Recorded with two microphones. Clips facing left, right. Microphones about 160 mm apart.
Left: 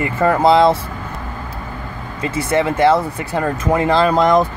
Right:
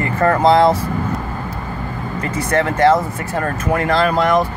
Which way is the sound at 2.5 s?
10° left (ahead or behind).